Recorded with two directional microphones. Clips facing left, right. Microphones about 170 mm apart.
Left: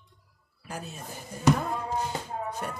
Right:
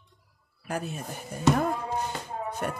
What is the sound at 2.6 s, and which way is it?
Speech, 55° right (ahead or behind).